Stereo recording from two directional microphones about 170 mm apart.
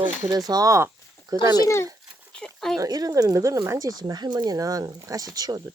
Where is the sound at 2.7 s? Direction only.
20° right (ahead or behind).